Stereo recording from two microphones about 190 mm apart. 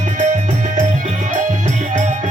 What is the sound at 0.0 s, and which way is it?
Music, 40° right (ahead or behind).